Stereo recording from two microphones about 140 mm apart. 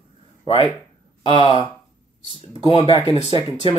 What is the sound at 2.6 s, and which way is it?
Speech, 45° left (ahead or behind).